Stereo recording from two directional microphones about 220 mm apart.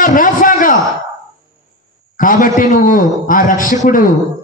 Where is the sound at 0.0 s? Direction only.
40° left (ahead or behind).